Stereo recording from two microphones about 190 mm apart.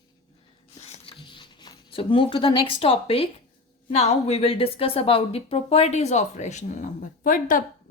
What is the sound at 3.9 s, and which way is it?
A woman's voice, 35° left (ahead or behind).